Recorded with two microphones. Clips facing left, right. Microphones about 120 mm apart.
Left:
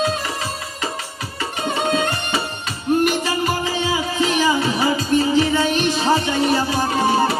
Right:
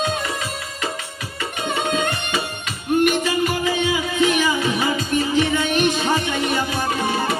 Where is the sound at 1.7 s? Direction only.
35° left (ahead or behind).